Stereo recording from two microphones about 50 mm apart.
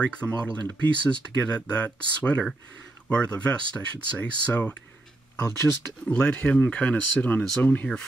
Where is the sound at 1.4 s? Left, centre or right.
Left.